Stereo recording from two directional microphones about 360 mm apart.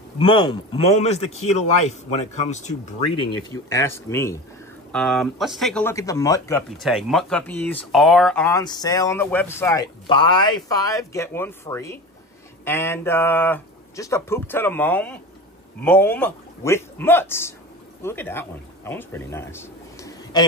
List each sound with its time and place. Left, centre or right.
0.2 s speech: centre